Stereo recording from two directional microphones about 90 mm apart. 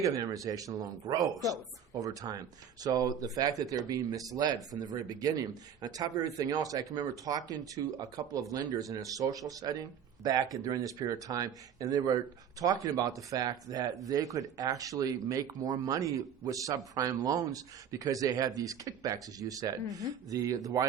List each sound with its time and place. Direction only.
0.0 s speech: 40° right (ahead or behind)